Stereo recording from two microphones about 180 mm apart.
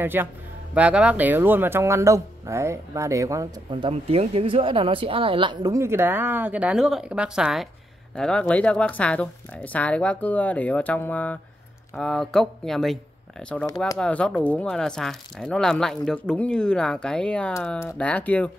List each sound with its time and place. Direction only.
0.0 s speech: 10° right (ahead or behind); by 18.5 s 10° left (ahead or behind)